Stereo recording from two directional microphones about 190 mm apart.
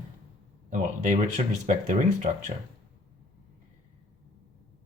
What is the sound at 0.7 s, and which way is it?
Speech, 40° right (ahead or behind).